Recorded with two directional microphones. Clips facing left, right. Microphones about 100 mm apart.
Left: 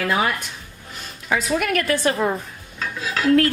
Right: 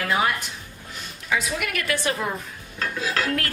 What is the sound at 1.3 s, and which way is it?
Speech, 45° left (ahead or behind).